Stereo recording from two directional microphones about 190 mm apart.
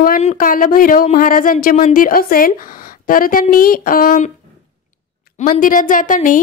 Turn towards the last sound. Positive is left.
turn(degrees=45)  # may be behind; listen again after turning